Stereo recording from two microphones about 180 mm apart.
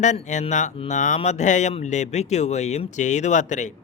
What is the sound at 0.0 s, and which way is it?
Speech, 40° left (ahead or behind).